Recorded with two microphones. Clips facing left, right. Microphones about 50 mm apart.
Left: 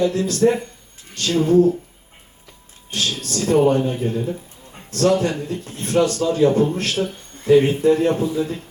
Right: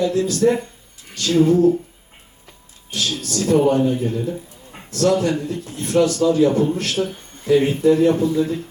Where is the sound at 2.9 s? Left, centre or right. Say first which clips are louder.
Even; left.